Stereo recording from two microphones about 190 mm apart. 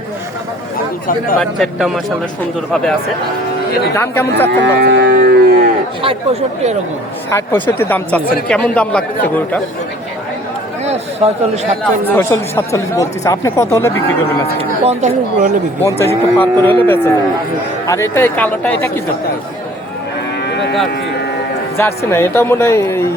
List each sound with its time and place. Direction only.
1.4 s speech: centre (ahead or behind)
3.9 s speech: 10° left (ahead or behind)
4.8 s a sound: 60° right (ahead or behind)
7.3 s speech: 10° left (ahead or behind)
10.8 s speech: 35° right (ahead or behind)
11.8 s speech: 10° left (ahead or behind)
14.6 s speech: 35° right (ahead or behind)
15.8 s speech: 15° left (ahead or behind)
20.4 s moo: 60° left (ahead or behind)
21.8 s speech: 15° left (ahead or behind)